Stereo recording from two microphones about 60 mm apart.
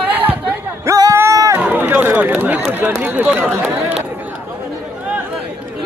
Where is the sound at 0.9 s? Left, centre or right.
Right.